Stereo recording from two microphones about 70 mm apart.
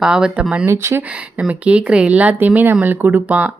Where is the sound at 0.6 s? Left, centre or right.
Right.